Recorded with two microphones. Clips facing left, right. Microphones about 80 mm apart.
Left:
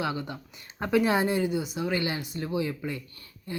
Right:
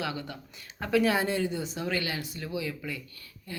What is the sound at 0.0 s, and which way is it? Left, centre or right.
Speech, left.